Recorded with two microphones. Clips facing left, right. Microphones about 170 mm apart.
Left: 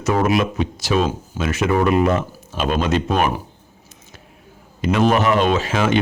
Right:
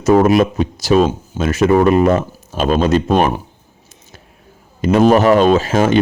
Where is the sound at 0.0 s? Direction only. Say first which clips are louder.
Right 7 dB; 40° right (ahead or behind).